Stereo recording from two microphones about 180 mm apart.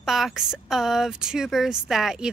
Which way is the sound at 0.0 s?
Centre (ahead or behind).